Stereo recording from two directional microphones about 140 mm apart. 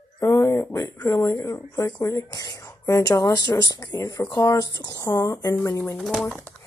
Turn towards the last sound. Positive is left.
turn(degrees=0)  # may be behind; listen again after turning